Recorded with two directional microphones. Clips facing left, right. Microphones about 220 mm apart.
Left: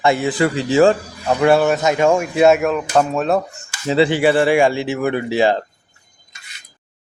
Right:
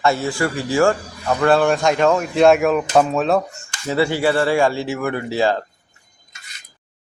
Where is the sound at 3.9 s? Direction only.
20° left (ahead or behind).